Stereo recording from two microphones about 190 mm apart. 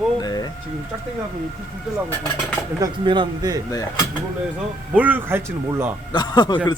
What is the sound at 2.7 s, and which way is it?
Speech, 20° right (ahead or behind).